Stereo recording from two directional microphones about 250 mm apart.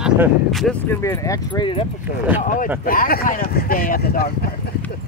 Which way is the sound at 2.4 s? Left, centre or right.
Left.